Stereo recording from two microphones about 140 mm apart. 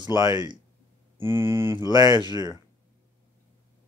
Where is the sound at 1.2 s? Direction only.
15° right (ahead or behind).